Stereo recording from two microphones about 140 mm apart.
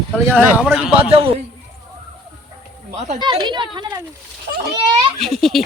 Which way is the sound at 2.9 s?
50° right (ahead or behind).